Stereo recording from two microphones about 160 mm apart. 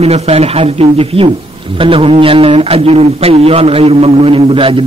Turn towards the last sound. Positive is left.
turn(degrees=-35)  # may be behind; listen again after turning